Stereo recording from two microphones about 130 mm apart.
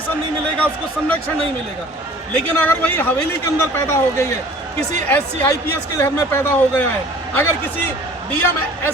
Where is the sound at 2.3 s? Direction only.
10° left (ahead or behind).